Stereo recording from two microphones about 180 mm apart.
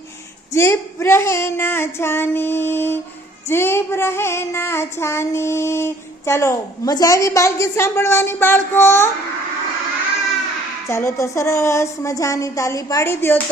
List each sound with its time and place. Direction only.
0.5 s female singing: 15° left (ahead or behind)
10.8 s female singing: 15° left (ahead or behind)